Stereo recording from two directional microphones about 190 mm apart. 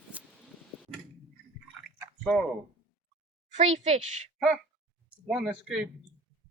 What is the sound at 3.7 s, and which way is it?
Speech, 35° right (ahead or behind).